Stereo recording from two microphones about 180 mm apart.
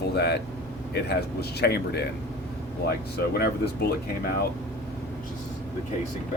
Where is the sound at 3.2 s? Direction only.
60° left (ahead or behind).